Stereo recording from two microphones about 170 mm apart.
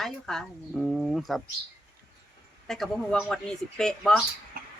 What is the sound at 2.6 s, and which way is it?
Speech, centre (ahead or behind).